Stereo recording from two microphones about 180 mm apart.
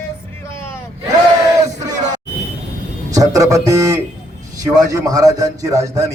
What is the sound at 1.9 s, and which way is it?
Music, 40° right (ahead or behind).